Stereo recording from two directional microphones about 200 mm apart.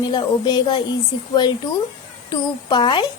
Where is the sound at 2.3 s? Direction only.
20° left (ahead or behind).